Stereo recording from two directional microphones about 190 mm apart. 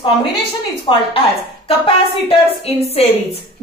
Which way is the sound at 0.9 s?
25° left (ahead or behind).